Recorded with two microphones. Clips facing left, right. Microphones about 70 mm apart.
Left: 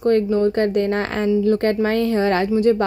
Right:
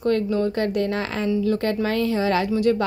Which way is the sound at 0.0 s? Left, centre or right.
Left.